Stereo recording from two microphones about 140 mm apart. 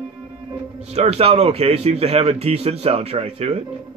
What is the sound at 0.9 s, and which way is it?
A man's voice, 50° right (ahead or behind).